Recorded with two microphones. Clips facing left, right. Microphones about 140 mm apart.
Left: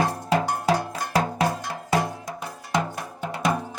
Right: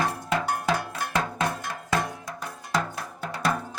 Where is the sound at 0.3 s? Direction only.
35° left (ahead or behind).